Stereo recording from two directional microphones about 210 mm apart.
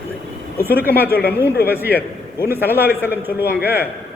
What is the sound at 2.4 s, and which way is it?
A man's voice, 10° right (ahead or behind).